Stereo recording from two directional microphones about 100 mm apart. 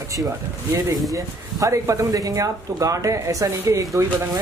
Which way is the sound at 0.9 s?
35° right (ahead or behind).